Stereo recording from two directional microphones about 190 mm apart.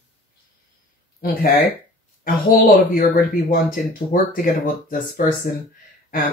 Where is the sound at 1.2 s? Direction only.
50° left (ahead or behind).